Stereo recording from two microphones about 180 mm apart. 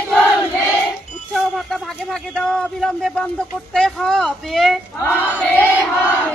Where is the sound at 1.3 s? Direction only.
Centre (ahead or behind).